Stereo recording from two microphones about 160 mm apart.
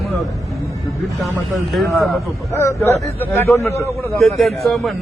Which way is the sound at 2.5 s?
15° left (ahead or behind).